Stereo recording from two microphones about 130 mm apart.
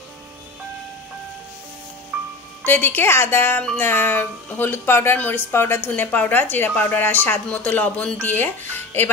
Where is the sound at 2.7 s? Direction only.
15° left (ahead or behind).